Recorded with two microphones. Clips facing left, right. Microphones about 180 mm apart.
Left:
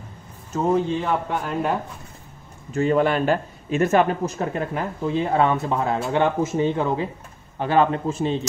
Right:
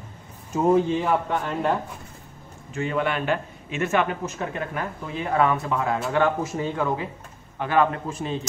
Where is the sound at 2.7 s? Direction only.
40° left (ahead or behind).